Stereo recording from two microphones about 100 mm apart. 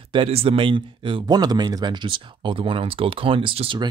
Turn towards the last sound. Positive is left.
turn(degrees=-60)  # may be behind; listen again after turning